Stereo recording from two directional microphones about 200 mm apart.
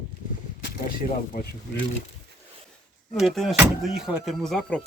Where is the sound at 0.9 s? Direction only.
45° left (ahead or behind).